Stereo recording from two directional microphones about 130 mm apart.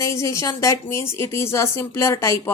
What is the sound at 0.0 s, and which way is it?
A woman's voice, 25° left (ahead or behind).